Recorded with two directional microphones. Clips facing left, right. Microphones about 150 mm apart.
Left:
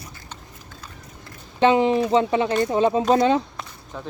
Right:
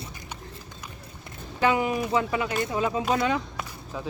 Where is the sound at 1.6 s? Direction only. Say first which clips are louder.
Left 7 dB; 25° left (ahead or behind).